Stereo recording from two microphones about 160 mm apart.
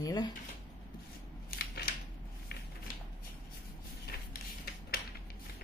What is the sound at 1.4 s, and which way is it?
Scissors, 70° left (ahead or behind).